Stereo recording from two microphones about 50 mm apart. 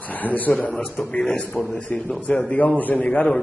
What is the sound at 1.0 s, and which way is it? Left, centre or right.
Speech, centre.